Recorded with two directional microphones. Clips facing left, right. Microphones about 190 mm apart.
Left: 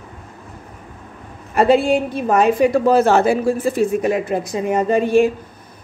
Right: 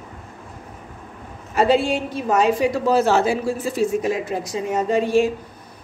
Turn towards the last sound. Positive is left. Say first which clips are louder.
# left 3 dB
turn(degrees=55)  # may be behind; listen again after turning